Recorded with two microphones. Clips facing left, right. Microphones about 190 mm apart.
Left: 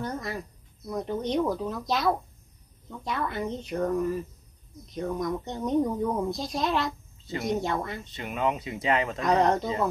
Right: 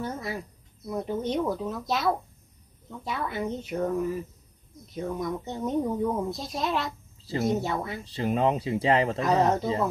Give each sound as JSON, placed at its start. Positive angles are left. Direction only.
{"t": 0.0, "sound": "a woman's voice", "side_deg": -5}
{"t": 8.0, "sound": "speech", "side_deg": -30}
{"t": 9.2, "sound": "a woman's voice", "side_deg": -5}